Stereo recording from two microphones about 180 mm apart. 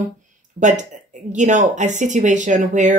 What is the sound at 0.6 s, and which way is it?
A woman's voice, 40° right (ahead or behind).